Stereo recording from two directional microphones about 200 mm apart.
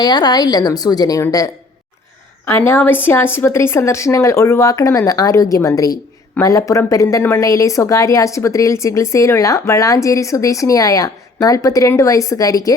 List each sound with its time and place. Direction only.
0.0 s a woman's voice: 20° left (ahead or behind)
2.5 s a woman's voice: 10° left (ahead or behind)